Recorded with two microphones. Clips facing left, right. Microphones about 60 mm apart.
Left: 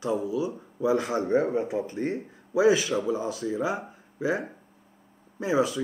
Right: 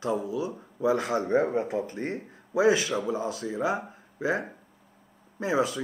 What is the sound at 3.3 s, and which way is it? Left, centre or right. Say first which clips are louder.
Speech: even; right.